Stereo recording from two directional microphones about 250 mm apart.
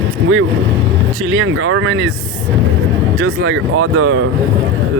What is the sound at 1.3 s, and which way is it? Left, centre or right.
Speech, right.